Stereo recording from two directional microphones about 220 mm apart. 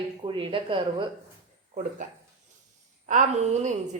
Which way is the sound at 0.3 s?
25° right (ahead or behind).